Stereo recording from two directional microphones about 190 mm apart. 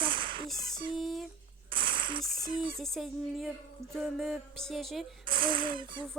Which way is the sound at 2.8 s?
Centre (ahead or behind).